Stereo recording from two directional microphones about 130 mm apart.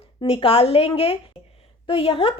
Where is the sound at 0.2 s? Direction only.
40° left (ahead or behind).